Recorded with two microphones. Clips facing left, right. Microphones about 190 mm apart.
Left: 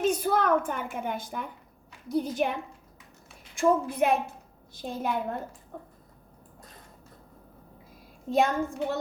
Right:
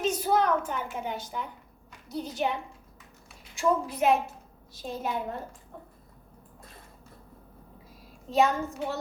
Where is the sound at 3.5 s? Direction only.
55° left (ahead or behind).